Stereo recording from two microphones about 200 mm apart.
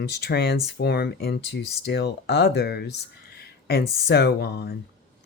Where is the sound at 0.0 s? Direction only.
55° left (ahead or behind).